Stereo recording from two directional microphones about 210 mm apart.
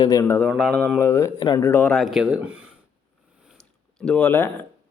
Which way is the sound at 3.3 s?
5° right (ahead or behind).